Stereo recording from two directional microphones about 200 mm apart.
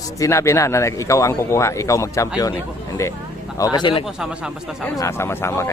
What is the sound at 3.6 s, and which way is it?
A man's voice, 20° left (ahead or behind).